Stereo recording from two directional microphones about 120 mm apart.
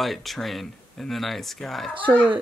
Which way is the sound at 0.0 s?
Centre (ahead or behind).